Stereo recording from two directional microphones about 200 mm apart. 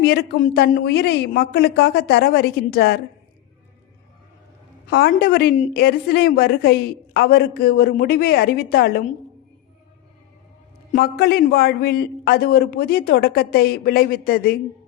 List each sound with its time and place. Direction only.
0.0 s a man's voice: 50° left (ahead or behind)
4.9 s a man's voice: 50° left (ahead or behind)
10.9 s a man's voice: 50° left (ahead or behind)